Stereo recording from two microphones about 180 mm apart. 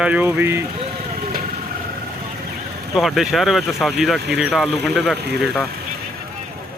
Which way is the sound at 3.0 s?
Centre (ahead or behind).